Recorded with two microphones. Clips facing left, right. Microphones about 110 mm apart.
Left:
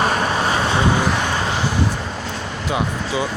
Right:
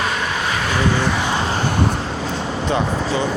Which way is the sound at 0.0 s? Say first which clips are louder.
Left 3 dB; 35° left (ahead or behind).